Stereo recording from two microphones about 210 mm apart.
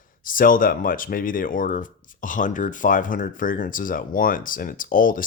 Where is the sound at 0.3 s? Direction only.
40° left (ahead or behind).